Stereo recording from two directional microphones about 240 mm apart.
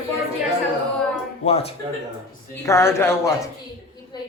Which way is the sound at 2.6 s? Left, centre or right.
Centre.